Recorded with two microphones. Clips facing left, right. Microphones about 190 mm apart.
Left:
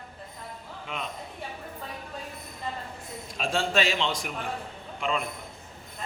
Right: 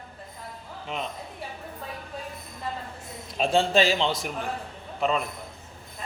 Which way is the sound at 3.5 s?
30° right (ahead or behind).